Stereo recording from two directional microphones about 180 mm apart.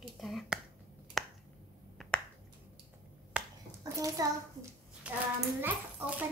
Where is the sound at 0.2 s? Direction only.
Centre (ahead or behind).